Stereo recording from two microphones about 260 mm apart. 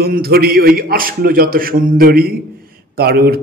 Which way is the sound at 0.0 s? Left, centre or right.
Right.